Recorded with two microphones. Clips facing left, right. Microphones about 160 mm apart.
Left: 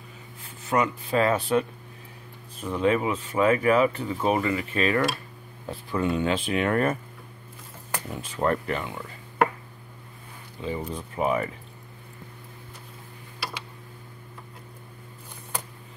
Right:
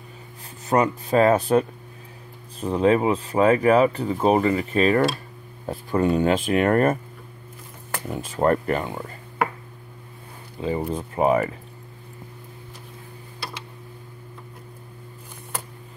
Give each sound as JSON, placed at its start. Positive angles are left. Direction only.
{"t": 0.7, "sound": "speech", "side_deg": -40}
{"t": 8.1, "sound": "speech", "side_deg": -40}
{"t": 10.6, "sound": "speech", "side_deg": -40}